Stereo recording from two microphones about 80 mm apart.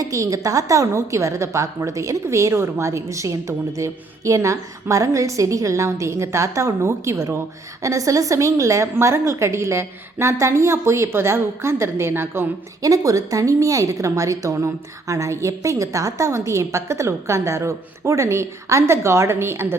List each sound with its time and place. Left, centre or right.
0.0 s a woman's voice: right
12.8 s a woman's voice: right